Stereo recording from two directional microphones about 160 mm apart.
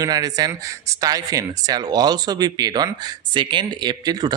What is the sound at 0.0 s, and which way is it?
A man's voice, 25° right (ahead or behind).